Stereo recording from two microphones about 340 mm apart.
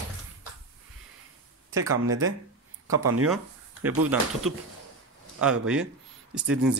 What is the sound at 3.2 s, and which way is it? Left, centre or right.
Speech, centre.